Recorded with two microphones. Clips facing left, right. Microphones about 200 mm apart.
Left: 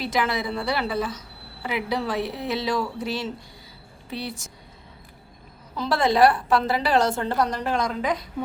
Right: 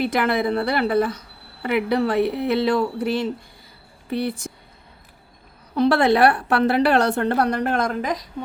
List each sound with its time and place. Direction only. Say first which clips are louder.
0.0 s a woman's voice: right 5 dB; 60° right (ahead or behind)
5.7 s a woman's voice: right 5 dB; 65° right (ahead or behind); by 8.2 s 50° right (ahead or behind)